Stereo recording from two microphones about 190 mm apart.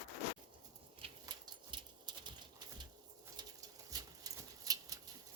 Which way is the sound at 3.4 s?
20° right (ahead or behind).